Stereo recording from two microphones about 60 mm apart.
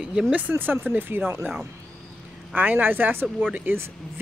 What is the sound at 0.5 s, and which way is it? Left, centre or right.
Speech, right.